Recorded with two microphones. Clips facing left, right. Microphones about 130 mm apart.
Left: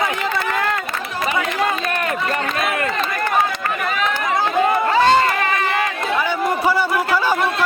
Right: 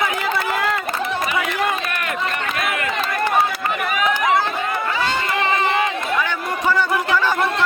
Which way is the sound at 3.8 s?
15° right (ahead or behind).